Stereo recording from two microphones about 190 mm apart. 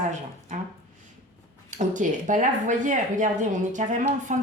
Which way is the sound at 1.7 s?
40° right (ahead or behind).